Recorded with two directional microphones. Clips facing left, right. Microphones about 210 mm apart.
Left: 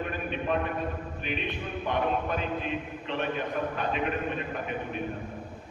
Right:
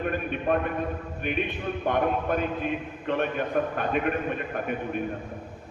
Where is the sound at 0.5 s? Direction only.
50° right (ahead or behind).